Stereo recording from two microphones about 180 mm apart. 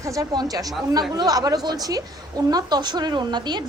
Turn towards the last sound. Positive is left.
turn(degrees=-25)  # may be behind; listen again after turning